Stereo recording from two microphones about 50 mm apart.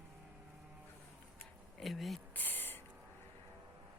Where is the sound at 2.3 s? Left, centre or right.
Left.